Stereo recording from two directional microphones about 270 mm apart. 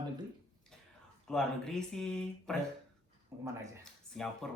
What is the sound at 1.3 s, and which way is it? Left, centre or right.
Speech, centre.